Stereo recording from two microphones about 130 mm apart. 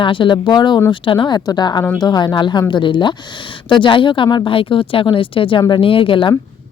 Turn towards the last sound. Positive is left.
turn(degrees=40)  # may be behind; listen again after turning